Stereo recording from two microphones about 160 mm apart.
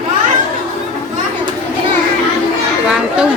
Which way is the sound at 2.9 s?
5° right (ahead or behind).